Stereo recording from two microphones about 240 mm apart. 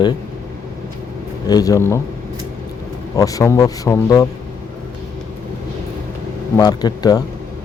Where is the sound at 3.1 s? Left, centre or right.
Centre.